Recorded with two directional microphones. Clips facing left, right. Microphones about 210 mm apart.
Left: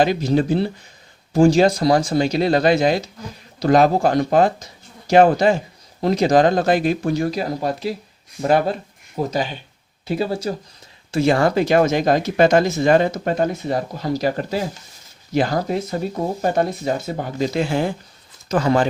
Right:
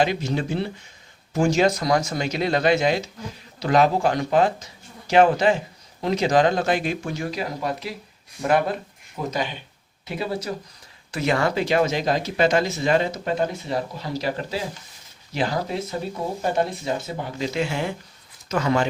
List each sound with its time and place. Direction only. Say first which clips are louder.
0.0 s speech: left 5 dB; 35° left (ahead or behind)
11.4 s speech: left 5 dB; 45° left (ahead or behind)